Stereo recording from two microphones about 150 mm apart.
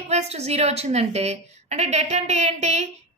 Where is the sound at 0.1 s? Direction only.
45° right (ahead or behind).